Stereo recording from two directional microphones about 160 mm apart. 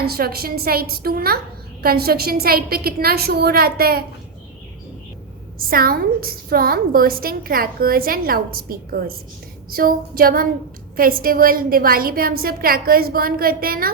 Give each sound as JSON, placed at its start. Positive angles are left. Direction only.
{"t": 0.0, "sound": "a woman's voice", "side_deg": -75}
{"t": 5.5, "sound": "a woman's voice", "side_deg": -65}